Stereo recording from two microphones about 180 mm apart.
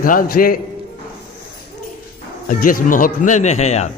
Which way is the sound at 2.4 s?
50° left (ahead or behind).